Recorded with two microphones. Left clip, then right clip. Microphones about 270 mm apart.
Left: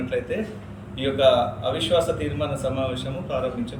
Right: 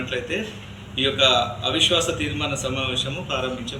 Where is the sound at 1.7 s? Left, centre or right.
Centre.